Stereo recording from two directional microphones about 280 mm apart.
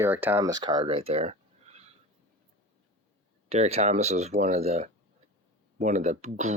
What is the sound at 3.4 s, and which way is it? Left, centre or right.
Speech, right.